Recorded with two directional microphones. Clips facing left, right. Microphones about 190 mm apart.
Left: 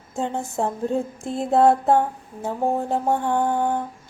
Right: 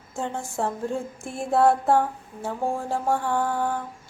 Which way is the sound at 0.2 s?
20° left (ahead or behind).